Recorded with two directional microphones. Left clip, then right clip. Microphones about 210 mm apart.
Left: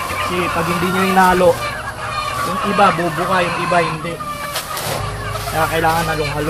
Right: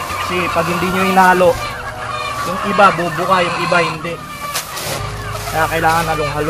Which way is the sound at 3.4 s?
55° right (ahead or behind).